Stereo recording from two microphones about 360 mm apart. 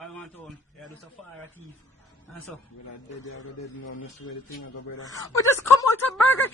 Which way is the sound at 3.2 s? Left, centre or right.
Left.